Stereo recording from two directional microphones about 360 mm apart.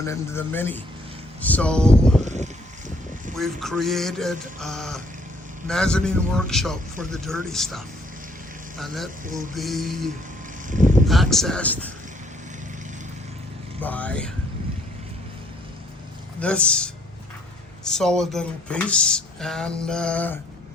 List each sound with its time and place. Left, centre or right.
0.0 s a man's voice: centre
2.2 s speech: centre
3.3 s speech: centre
9.2 s speech: right
9.6 s speech: centre
13.8 s speech: centre
16.4 s speech: centre